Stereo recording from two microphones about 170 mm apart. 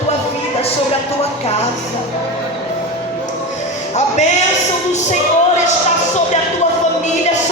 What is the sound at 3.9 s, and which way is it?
Music, 40° left (ahead or behind).